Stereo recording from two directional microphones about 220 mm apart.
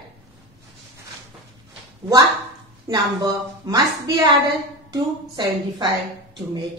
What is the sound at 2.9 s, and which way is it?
A woman's voice, 15° right (ahead or behind).